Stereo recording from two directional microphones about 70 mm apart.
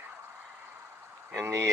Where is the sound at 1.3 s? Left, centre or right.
Right.